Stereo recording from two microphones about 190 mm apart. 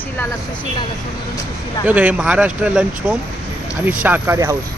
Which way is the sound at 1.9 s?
10° right (ahead or behind).